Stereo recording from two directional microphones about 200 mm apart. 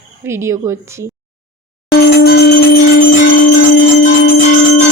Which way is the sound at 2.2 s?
50° left (ahead or behind).